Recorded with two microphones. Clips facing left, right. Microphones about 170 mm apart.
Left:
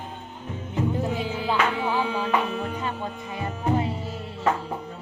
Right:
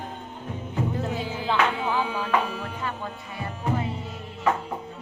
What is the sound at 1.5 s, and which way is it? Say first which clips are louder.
Music: right 1 dB; 20° left (ahead or behind).